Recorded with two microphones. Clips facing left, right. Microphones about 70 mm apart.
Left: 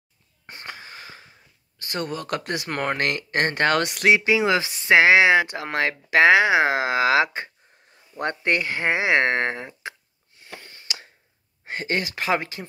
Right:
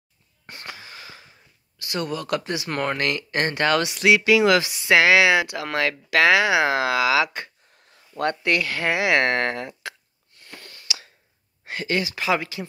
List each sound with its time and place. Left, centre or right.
0.5 s wheeze: left
1.8 s speech: left
4.1 s speech: left
11.6 s speech: left